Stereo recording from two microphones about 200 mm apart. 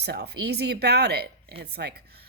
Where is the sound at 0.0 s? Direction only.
55° right (ahead or behind).